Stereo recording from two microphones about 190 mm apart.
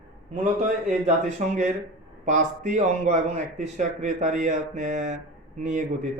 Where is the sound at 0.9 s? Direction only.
40° right (ahead or behind).